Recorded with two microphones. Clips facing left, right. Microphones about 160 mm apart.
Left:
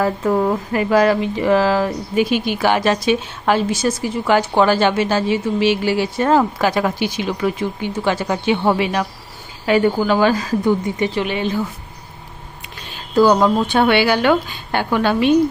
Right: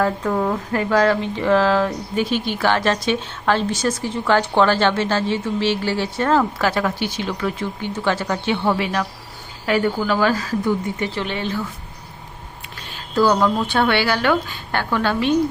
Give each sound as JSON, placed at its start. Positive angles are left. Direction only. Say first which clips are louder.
{"t": 0.0, "sound": "a woman's voice", "louder": "left 3 dB", "side_deg": 10}
{"t": 13.1, "sound": "speech", "louder": "left 4 dB", "side_deg": 15}